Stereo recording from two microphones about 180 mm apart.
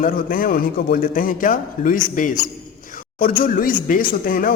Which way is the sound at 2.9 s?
50° left (ahead or behind).